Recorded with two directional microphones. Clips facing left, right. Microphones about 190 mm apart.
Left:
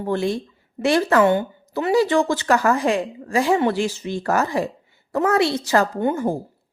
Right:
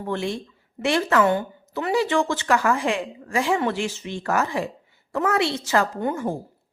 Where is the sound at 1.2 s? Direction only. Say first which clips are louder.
Left 3 dB; 25° left (ahead or behind).